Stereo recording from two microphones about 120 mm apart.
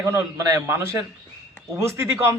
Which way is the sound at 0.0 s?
25° right (ahead or behind).